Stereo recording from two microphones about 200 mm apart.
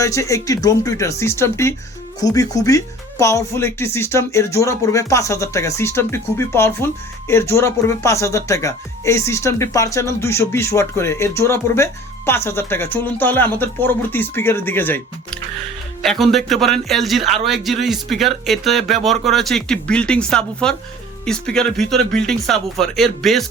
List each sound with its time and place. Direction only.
0.0 s speech: 15° left (ahead or behind)
16.0 s a man's voice: centre (ahead or behind)